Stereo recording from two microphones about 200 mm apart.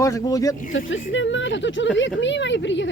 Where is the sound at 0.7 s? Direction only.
75° left (ahead or behind).